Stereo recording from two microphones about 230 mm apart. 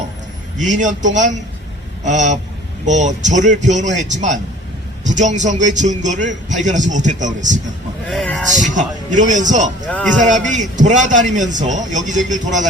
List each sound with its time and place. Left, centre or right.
0.5 s a man's voice: right
8.1 s speech: centre
8.5 s a man's voice: right